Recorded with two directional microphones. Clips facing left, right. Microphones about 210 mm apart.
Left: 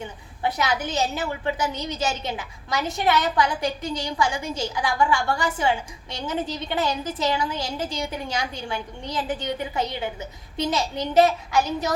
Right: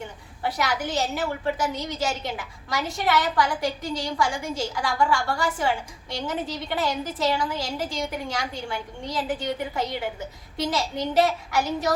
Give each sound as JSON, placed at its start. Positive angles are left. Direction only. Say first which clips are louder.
{"t": 0.4, "sound": "a woman's voice", "louder": "left 2 dB", "side_deg": 20}